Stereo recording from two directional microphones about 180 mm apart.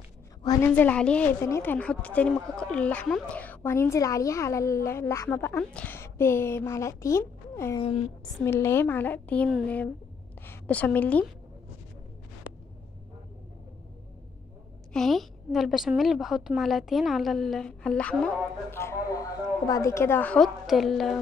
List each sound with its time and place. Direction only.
0.4 s a sound: 20° left (ahead or behind)
0.7 s a woman's voice: 10° left (ahead or behind)
7.8 s a woman's voice: 30° left (ahead or behind)
8.4 s a woman's voice: 15° left (ahead or behind)
14.9 s a woman's voice: centre (ahead or behind)